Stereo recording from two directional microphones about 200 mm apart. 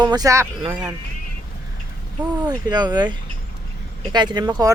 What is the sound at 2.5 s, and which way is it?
Speech, 20° right (ahead or behind).